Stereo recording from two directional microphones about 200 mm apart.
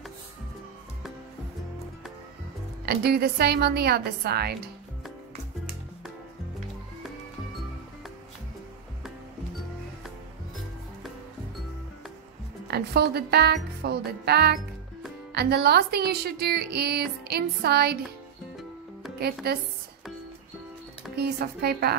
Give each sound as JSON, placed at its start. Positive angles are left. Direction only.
{"t": 2.8, "sound": "a woman's voice", "side_deg": -55}
{"t": 12.6, "sound": "a woman's voice", "side_deg": -55}
{"t": 19.0, "sound": "music", "side_deg": 0}
{"t": 19.4, "sound": "a woman's voice", "side_deg": -50}
{"t": 21.2, "sound": "a woman's voice", "side_deg": -50}